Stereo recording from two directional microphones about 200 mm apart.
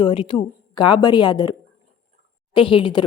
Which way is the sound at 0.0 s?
25° left (ahead or behind).